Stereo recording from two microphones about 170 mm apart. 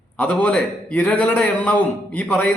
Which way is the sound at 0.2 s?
5° left (ahead or behind).